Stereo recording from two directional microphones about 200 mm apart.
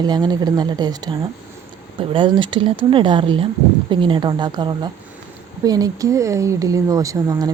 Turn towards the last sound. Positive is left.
turn(degrees=-15)  # may be behind; listen again after turning